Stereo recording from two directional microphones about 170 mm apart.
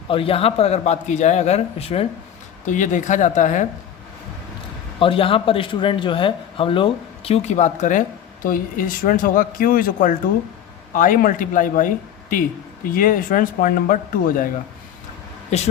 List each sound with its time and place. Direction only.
0.1 s a man's voice: 35° left (ahead or behind)
2.6 s a woman's voice: 50° left (ahead or behind)
4.9 s a man's voice: 30° left (ahead or behind); by 11.9 s 50° left (ahead or behind)
12.9 s speech: 55° left (ahead or behind)
15.4 s speech: 40° left (ahead or behind)